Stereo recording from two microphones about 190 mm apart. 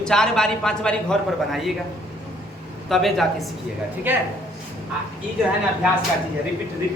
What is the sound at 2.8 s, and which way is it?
Speech, centre (ahead or behind).